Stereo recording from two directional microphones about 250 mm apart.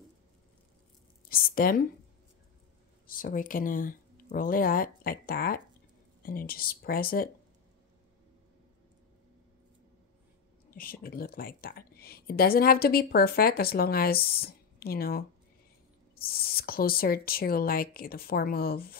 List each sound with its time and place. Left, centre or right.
1.3 s speech: left
3.1 s a woman's voice: left
10.7 s a woman's voice: left